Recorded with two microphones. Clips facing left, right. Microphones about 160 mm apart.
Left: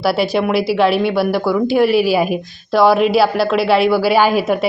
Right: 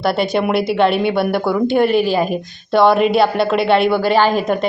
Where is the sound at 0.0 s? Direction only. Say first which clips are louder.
Left 1 dB; 5° left (ahead or behind).